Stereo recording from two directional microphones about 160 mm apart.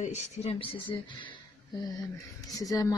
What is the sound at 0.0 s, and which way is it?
Speech, 45° left (ahead or behind).